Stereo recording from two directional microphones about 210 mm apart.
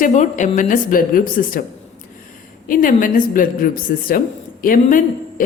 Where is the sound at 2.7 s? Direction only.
40° left (ahead or behind).